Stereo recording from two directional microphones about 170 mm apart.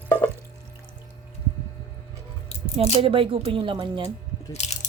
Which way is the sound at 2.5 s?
35° left (ahead or behind).